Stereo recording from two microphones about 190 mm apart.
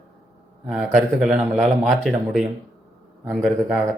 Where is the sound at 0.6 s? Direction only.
5° right (ahead or behind).